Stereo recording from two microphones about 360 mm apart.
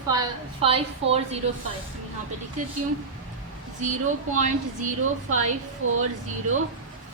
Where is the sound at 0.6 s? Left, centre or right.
Centre.